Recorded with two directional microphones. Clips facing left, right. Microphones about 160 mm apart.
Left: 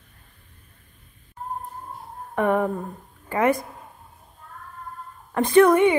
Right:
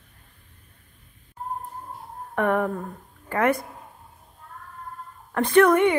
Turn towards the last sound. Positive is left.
turn(degrees=10)  # may be behind; listen again after turning